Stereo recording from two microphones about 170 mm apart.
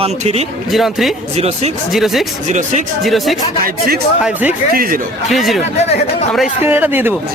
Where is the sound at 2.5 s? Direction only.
45° right (ahead or behind).